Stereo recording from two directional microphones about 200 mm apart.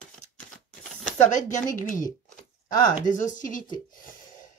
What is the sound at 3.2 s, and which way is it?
Speech, 40° left (ahead or behind).